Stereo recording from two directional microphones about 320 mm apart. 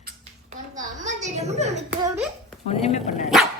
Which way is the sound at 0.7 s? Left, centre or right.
Right.